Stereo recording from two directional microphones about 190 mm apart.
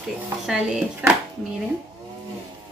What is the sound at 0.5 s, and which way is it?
Speech, 5° right (ahead or behind).